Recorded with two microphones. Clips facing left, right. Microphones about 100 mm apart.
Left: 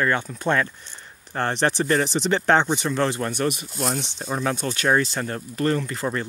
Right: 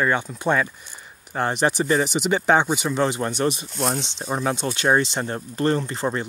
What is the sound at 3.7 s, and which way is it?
Speech, centre (ahead or behind).